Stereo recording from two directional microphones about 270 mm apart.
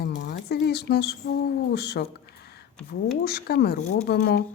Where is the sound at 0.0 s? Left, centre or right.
Left.